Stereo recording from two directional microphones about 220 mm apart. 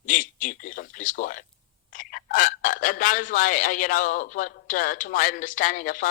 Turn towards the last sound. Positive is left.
turn(degrees=35)  # may be behind; listen again after turning